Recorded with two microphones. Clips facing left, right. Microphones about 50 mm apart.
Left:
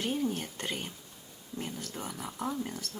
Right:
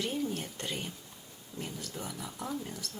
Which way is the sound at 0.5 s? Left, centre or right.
Left.